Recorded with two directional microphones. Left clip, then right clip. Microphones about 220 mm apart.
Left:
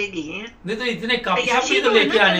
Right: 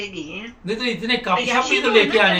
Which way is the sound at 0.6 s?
Centre (ahead or behind).